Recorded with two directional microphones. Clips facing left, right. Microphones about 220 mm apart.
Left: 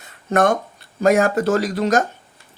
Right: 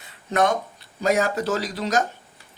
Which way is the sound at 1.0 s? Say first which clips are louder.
Left 6 dB; 50° left (ahead or behind).